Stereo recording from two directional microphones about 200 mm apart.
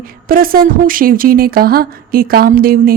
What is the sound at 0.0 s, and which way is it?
Speech, 45° right (ahead or behind).